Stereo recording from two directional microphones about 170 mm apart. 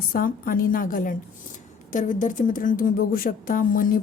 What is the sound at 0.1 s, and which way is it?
A woman's voice, 55° left (ahead or behind).